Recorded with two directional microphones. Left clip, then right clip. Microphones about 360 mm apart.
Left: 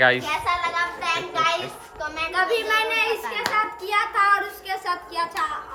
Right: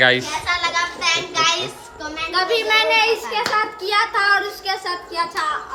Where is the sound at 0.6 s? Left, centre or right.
Centre.